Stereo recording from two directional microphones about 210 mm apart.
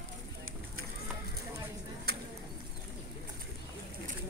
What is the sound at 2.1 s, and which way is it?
Bird, 50° right (ahead or behind).